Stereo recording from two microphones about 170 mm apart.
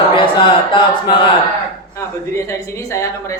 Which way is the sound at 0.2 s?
30° left (ahead or behind).